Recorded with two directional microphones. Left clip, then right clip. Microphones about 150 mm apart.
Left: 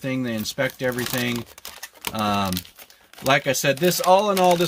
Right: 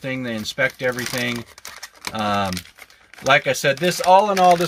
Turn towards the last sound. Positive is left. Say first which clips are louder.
# right 3 dB
turn(degrees=5)  # may be behind; listen again after turning